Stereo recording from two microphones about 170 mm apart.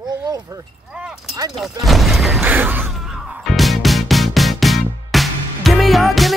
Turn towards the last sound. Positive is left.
turn(degrees=0)  # may be behind; listen again after turning